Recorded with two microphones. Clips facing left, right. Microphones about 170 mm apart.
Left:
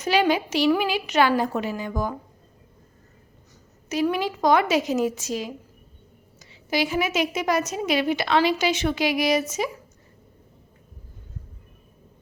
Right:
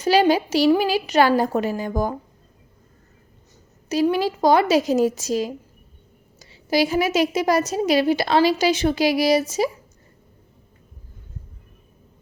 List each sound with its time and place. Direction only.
0.0 s a woman's voice: 35° right (ahead or behind)
4.1 s a woman's voice: 35° right (ahead or behind)